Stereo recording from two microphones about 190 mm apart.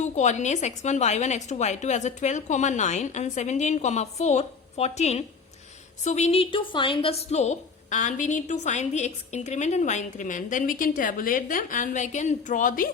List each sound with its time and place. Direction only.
0.0 s a woman's voice: 40° left (ahead or behind)